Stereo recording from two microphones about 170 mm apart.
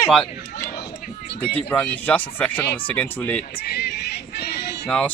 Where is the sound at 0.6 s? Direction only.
70° left (ahead or behind).